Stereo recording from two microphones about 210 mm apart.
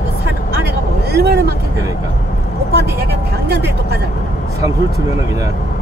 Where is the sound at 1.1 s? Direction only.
50° right (ahead or behind).